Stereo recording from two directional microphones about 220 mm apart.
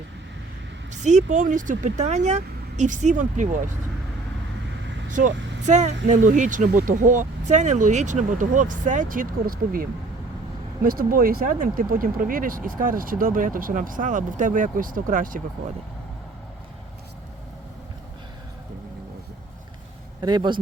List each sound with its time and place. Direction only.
0.9 s speech: 35° right (ahead or behind)
5.1 s speech: 35° right (ahead or behind)
10.8 s speech: 40° right (ahead or behind)
20.2 s a man's voice: 20° right (ahead or behind)